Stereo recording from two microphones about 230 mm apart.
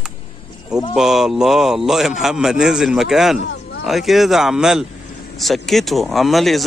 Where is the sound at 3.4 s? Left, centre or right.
Left.